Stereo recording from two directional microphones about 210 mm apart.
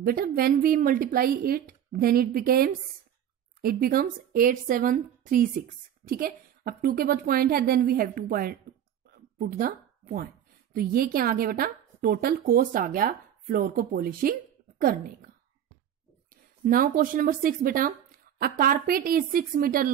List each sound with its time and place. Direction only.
0.0 s a woman's voice: 45° right (ahead or behind)
16.6 s a woman's voice: 40° right (ahead or behind)